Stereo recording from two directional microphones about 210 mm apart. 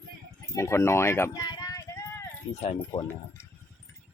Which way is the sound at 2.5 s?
30° left (ahead or behind).